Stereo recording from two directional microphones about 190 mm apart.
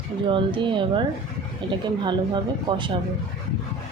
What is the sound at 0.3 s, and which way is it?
Speech, 25° right (ahead or behind).